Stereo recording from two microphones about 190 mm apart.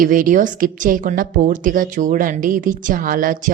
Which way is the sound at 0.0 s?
45° right (ahead or behind).